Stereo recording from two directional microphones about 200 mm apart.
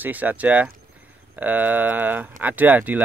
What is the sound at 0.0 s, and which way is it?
Speech, 10° right (ahead or behind).